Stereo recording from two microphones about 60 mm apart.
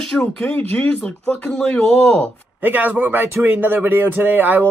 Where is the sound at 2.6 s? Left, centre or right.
Right.